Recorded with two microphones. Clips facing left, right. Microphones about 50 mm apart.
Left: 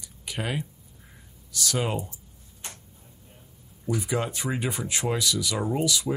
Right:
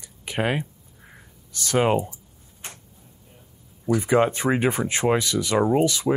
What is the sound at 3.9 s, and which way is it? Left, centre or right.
Speech, right.